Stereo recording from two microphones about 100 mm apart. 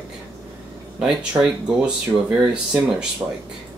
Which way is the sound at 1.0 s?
5° right (ahead or behind).